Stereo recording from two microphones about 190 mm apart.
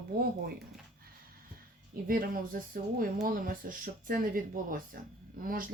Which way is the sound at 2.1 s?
45° right (ahead or behind).